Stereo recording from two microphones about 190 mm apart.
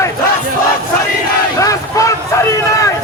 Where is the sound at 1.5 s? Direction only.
15° left (ahead or behind).